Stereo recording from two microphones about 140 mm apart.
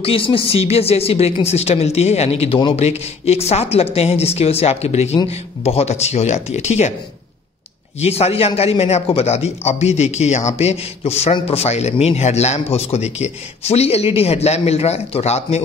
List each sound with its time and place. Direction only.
0.0 s speech: 40° left (ahead or behind)
8.0 s speech: 45° left (ahead or behind)